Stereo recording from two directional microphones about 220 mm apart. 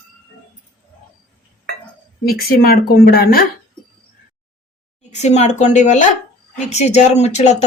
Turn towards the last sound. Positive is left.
turn(degrees=30)  # may be behind; listen again after turning